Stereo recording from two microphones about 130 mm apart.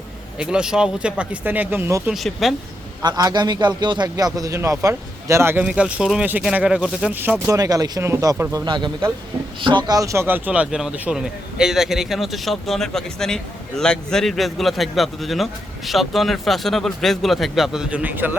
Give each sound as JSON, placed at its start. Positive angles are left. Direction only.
{"t": 0.3, "sound": "speech", "side_deg": -5}
{"t": 2.0, "sound": "a man's voice", "side_deg": 0}
{"t": 3.0, "sound": "a man's voice", "side_deg": -30}
{"t": 5.6, "sound": "a man's voice", "side_deg": -5}